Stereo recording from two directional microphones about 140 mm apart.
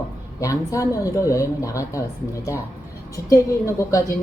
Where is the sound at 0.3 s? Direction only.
25° left (ahead or behind).